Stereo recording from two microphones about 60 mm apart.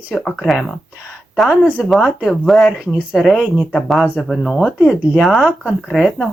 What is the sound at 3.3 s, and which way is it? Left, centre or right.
Speech, centre.